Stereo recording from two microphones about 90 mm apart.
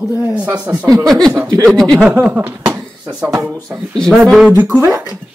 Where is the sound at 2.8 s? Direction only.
5° right (ahead or behind).